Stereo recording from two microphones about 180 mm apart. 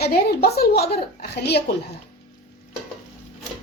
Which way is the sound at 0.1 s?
60° left (ahead or behind).